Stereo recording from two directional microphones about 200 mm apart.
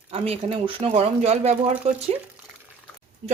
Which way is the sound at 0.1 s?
30° right (ahead or behind).